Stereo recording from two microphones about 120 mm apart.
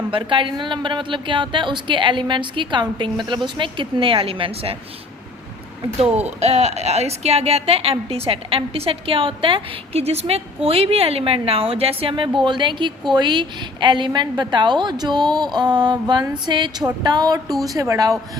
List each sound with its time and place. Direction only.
0.1 s a woman's voice: 45° right (ahead or behind)
6.0 s a woman's voice: 65° right (ahead or behind); by 18.2 s 30° right (ahead or behind)